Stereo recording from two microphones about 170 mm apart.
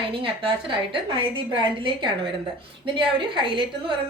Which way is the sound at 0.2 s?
30° right (ahead or behind).